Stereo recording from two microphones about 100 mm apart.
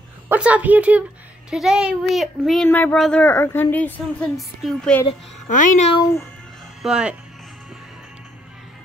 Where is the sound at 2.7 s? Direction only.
15° left (ahead or behind).